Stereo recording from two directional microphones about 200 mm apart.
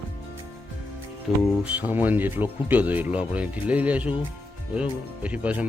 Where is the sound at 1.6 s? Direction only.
10° right (ahead or behind).